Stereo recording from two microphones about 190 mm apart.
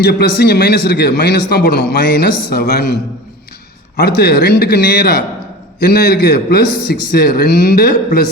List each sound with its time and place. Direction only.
0.0 s a man's voice: 60° left (ahead or behind)